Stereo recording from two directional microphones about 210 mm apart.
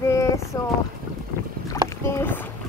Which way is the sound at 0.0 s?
15° left (ahead or behind).